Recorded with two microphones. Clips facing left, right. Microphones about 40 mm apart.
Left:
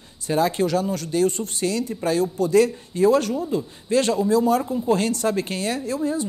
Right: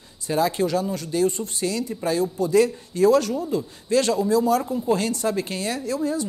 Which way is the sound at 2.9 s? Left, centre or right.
Left.